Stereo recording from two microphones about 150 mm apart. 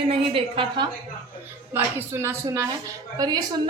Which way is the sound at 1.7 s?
15° right (ahead or behind).